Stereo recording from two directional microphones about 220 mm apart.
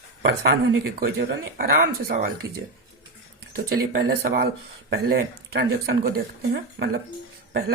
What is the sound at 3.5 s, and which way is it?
Speech, 45° right (ahead or behind).